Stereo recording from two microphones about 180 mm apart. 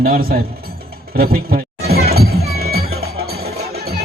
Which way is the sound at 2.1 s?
60° right (ahead or behind).